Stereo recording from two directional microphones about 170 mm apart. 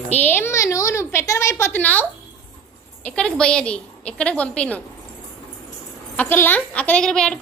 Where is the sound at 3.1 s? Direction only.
5° left (ahead or behind).